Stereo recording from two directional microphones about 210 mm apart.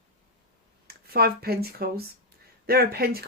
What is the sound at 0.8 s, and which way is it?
Speech, 45° right (ahead or behind).